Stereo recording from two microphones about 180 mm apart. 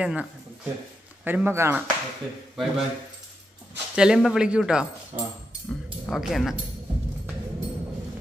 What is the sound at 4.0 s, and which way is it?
Speech, 5° right (ahead or behind).